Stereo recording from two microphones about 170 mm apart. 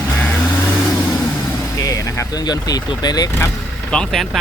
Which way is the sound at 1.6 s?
20° left (ahead or behind).